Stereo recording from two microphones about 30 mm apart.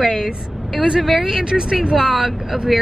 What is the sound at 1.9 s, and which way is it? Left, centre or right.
Speech, centre.